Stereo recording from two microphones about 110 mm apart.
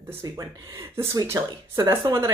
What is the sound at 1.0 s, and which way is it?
Speech, 25° right (ahead or behind).